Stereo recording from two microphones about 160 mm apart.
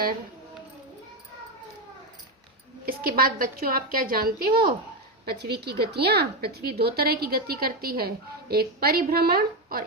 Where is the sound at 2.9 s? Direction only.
65° right (ahead or behind).